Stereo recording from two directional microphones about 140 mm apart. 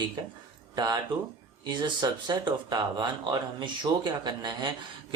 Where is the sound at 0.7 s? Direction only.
30° right (ahead or behind).